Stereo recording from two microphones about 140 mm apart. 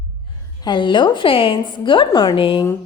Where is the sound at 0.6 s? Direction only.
35° left (ahead or behind).